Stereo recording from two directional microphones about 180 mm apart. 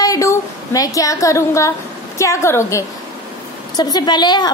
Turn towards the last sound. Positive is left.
turn(degrees=25)  # may be behind; listen again after turning